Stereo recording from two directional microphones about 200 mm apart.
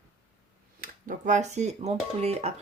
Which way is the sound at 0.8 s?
45° right (ahead or behind).